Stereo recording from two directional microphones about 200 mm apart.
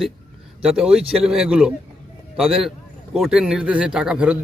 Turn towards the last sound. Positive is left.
turn(degrees=-5)  # may be behind; listen again after turning